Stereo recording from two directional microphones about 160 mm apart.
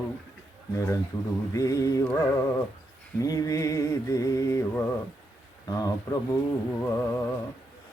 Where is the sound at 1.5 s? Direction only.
20° left (ahead or behind).